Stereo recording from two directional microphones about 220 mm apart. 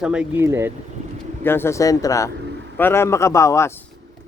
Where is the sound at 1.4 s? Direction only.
10° left (ahead or behind).